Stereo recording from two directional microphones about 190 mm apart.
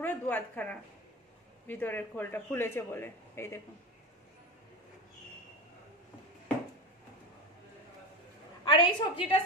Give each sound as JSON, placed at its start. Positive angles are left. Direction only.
{"t": 0.0, "sound": "speech", "side_deg": 10}
{"t": 8.6, "sound": "a woman's voice", "side_deg": 25}